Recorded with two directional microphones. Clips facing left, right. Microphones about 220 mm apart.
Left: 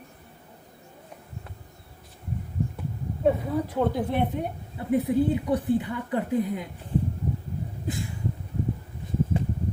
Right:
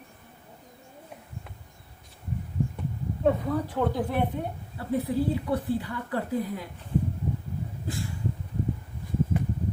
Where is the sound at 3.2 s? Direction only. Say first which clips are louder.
Left 1 dB; 15° left (ahead or behind).